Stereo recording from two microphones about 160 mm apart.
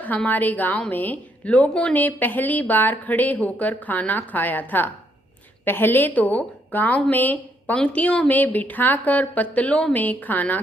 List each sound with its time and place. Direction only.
0.0 s a woman's voice: 10° left (ahead or behind)